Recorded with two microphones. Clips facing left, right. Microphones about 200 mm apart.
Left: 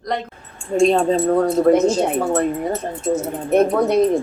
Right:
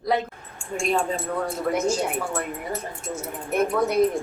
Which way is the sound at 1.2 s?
50° left (ahead or behind).